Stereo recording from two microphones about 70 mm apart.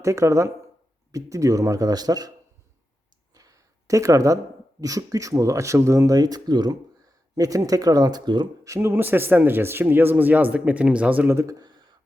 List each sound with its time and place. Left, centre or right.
0.0 s speech: right
3.3 s a sound: right
4.8 s speech: right
7.3 s speech: right
8.6 s a man's voice: right
8.9 s a man's voice: right
11.3 s speech: right